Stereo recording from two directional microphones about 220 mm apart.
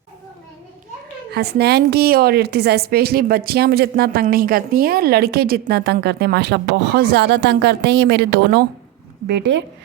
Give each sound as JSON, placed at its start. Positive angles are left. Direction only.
{"t": 1.3, "sound": "a woman's voice", "side_deg": -45}